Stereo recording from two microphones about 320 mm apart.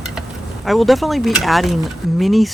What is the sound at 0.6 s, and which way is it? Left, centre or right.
Speech, centre.